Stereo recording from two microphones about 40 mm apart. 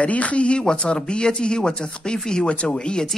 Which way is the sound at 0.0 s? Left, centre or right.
Left.